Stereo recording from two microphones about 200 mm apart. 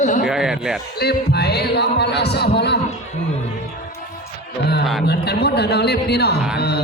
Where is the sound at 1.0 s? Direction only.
55° left (ahead or behind).